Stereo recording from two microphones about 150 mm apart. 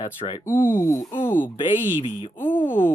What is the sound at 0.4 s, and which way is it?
Speech, 15° left (ahead or behind).